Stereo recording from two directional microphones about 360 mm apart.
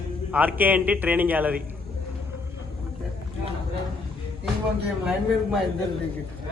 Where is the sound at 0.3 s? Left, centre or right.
Centre.